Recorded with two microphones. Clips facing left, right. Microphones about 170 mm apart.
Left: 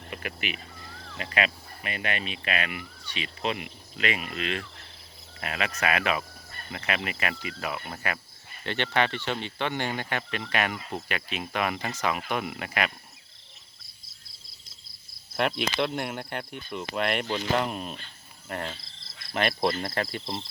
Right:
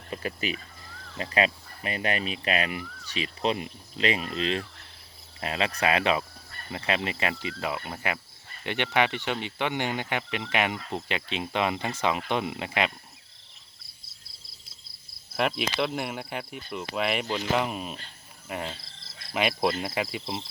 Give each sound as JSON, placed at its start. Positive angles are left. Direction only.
{"t": 0.1, "sound": "speech", "side_deg": -30}
{"t": 15.4, "sound": "speech", "side_deg": 0}
{"t": 18.4, "sound": "cricket", "side_deg": -5}
{"t": 19.3, "sound": "speech", "side_deg": -5}